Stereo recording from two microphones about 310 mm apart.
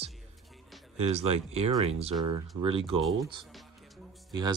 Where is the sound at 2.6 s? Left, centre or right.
Centre.